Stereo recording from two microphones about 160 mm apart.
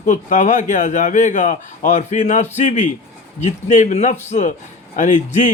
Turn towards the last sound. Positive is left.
turn(degrees=50)  # may be behind; listen again after turning